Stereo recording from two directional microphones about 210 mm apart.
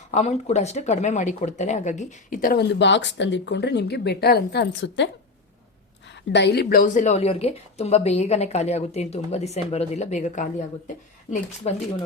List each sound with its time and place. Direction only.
0.1 s a woman's voice: 30° left (ahead or behind)
2.7 s a woman's voice: 60° left (ahead or behind)
6.1 s a woman's voice: 55° left (ahead or behind); by 11.7 s 35° left (ahead or behind)